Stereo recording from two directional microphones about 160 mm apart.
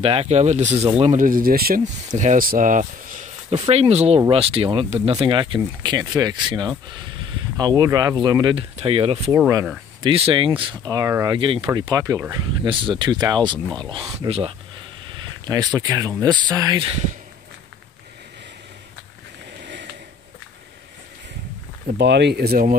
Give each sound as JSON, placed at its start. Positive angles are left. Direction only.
{"t": 0.0, "sound": "speech", "side_deg": -40}
{"t": 1.1, "sound": "speech", "side_deg": -60}
{"t": 2.1, "sound": "speech", "side_deg": -55}
{"t": 3.5, "sound": "speech", "side_deg": -35}
{"t": 5.1, "sound": "speech", "side_deg": -30}
{"t": 8.7, "sound": "speech", "side_deg": -35}
{"t": 11.3, "sound": "speech", "side_deg": -35}
{"t": 12.6, "sound": "speech", "side_deg": -35}
{"t": 19.6, "sound": "a sound", "side_deg": -90}
{"t": 21.8, "sound": "speech", "side_deg": -90}